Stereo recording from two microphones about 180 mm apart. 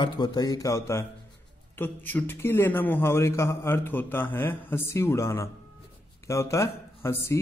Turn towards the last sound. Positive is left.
turn(degrees=15)  # may be behind; listen again after turning